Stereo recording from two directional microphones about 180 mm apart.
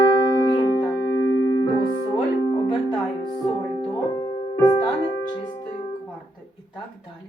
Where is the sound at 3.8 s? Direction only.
25° left (ahead or behind).